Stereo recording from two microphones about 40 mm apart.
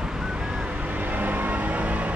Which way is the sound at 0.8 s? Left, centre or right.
Right.